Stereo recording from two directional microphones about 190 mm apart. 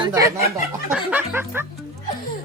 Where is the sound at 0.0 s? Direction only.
15° right (ahead or behind).